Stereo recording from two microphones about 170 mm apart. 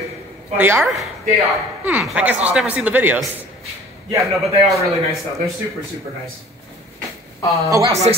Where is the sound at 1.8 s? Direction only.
5° right (ahead or behind).